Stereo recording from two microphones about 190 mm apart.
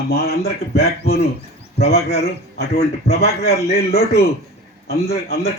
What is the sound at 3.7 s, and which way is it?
A man's voice, 55° left (ahead or behind).